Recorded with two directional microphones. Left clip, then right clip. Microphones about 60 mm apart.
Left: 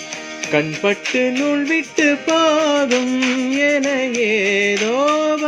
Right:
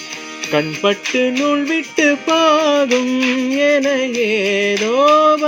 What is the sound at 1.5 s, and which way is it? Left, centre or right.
Music, right.